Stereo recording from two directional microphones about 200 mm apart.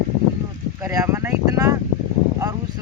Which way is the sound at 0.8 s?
15° right (ahead or behind).